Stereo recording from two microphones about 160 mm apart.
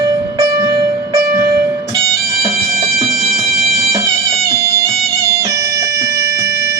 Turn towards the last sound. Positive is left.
turn(degrees=-15)  # may be behind; listen again after turning